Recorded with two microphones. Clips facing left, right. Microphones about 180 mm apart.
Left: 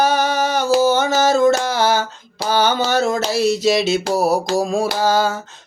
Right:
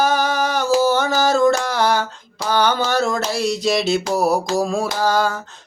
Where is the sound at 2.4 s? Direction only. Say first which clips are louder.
Left 1 dB; 25° left (ahead or behind).